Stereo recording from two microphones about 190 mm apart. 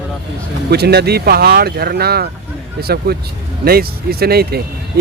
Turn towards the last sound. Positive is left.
turn(degrees=-55)  # may be behind; listen again after turning